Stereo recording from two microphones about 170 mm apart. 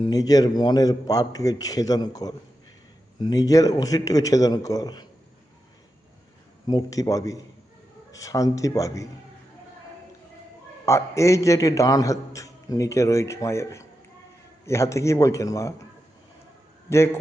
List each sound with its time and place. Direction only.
0.1 s a man's voice: 20° left (ahead or behind)
6.7 s a man's voice: 20° left (ahead or behind)
10.8 s a man's voice: 15° left (ahead or behind)
16.9 s a man's voice: 15° left (ahead or behind)